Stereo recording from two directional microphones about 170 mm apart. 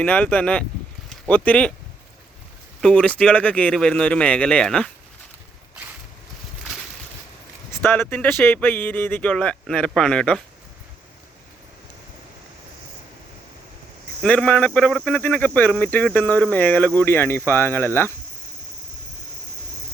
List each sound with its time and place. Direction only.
0.0 s speech: 10° left (ahead or behind)
2.8 s speech: 5° left (ahead or behind)
7.8 s speech: 10° left (ahead or behind)
14.2 s speech: 5° left (ahead or behind)